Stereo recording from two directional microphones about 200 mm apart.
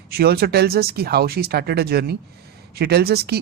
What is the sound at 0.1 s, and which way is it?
Speech, 50° right (ahead or behind).